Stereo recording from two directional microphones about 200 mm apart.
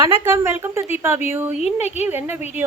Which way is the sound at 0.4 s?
10° right (ahead or behind).